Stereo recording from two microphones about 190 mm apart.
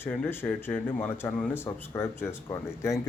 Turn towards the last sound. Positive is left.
turn(degrees=15)  # may be behind; listen again after turning